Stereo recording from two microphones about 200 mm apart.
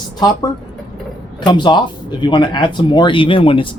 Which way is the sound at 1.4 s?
20° left (ahead or behind).